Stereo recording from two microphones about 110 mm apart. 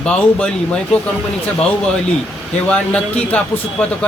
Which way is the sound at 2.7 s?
10° left (ahead or behind).